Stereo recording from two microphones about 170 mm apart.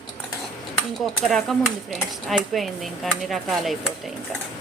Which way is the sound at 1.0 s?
Centre (ahead or behind).